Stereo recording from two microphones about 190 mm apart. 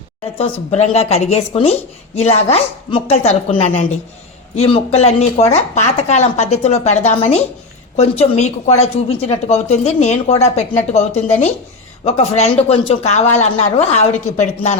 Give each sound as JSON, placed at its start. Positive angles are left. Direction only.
{"t": 0.3, "sound": "a woman's voice", "side_deg": 35}